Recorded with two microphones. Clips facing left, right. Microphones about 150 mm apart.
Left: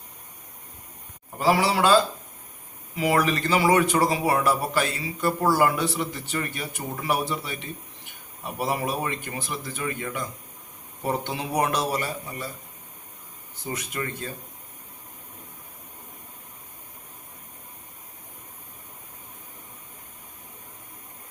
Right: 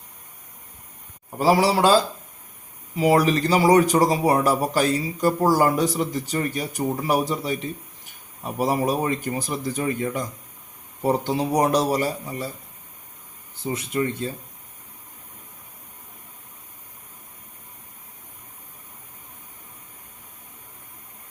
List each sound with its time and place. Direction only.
1.4 s speech: 40° right (ahead or behind)
13.7 s speech: 25° right (ahead or behind)